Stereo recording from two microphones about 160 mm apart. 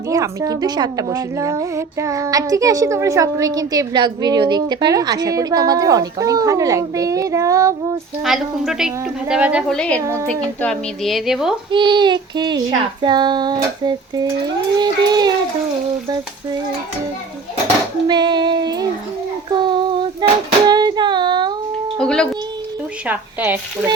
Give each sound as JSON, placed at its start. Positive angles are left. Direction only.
{"t": 0.1, "sound": "a woman's voice", "side_deg": -20}
{"t": 8.2, "sound": "speech", "side_deg": 0}
{"t": 9.7, "sound": "speech", "side_deg": 5}
{"t": 11.7, "sound": "a woman's voice", "side_deg": -30}
{"t": 18.1, "sound": "child singing", "side_deg": -25}
{"t": 20.2, "sound": "a sound", "side_deg": -25}
{"t": 20.7, "sound": "child singing", "side_deg": -25}
{"t": 21.9, "sound": "a sound", "side_deg": 5}
{"t": 23.0, "sound": "speech", "side_deg": -10}